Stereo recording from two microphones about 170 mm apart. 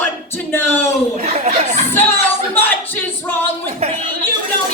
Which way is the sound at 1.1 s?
40° right (ahead or behind).